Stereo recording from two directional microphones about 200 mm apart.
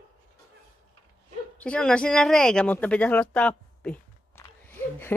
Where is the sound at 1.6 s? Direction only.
5° left (ahead or behind).